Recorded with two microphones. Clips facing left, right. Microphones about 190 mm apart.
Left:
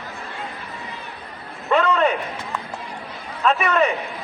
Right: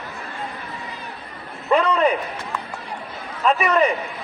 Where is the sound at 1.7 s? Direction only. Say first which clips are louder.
Right 1 dB; centre (ahead or behind).